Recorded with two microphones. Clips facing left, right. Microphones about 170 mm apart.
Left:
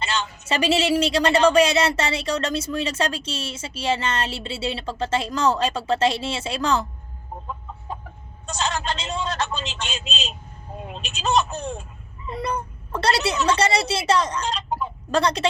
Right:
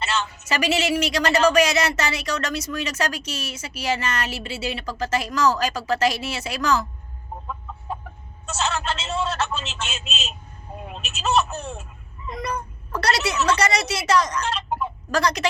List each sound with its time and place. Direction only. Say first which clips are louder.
0.0 s a sound: right 1 dB; 5° right (ahead or behind)
0.4 s a woman's voice: left 3 dB; 30° left (ahead or behind)
8.4 s a man's voice: even; 5° right (ahead or behind)
12.4 s a woman's voice: left 2 dB; 30° left (ahead or behind)